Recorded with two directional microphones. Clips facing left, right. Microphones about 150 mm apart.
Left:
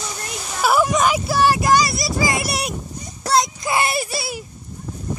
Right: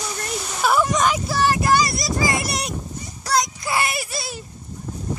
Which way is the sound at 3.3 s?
20° left (ahead or behind).